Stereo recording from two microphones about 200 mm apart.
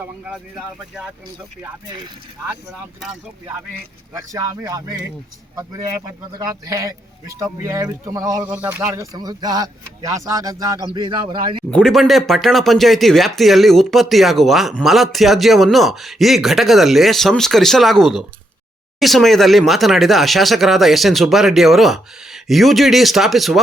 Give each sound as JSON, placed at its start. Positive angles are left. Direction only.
{"t": 0.3, "sound": "speech", "side_deg": 0}
{"t": 4.1, "sound": "speech", "side_deg": -15}
{"t": 6.4, "sound": "speech", "side_deg": -15}
{"t": 11.7, "sound": "speech", "side_deg": 0}